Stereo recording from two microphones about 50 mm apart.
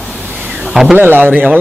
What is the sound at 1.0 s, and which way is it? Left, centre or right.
Speech, right.